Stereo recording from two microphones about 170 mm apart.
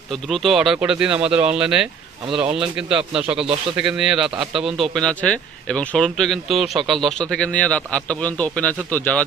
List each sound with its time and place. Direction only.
0.1 s a man's voice: centre (ahead or behind)
3.4 s speech: 35° right (ahead or behind)
3.8 s a man's voice: 5° right (ahead or behind)